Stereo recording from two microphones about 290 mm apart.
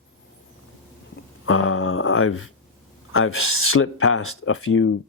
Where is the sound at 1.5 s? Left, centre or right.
Left.